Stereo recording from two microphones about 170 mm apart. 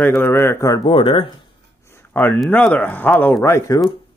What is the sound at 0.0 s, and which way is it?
Speech, 10° left (ahead or behind).